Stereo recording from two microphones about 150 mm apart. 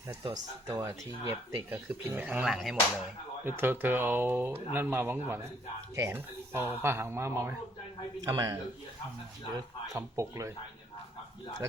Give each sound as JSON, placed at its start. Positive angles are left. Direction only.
{"t": 0.7, "sound": "speech", "side_deg": -20}
{"t": 3.4, "sound": "speech", "side_deg": -15}
{"t": 9.6, "sound": "speech", "side_deg": -20}